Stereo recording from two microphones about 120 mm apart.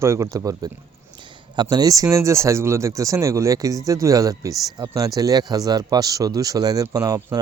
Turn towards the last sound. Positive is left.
turn(degrees=-30)  # may be behind; listen again after turning